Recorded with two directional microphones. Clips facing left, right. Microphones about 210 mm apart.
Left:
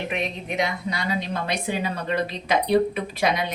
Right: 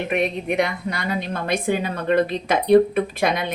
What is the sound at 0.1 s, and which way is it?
A woman's voice, 55° right (ahead or behind).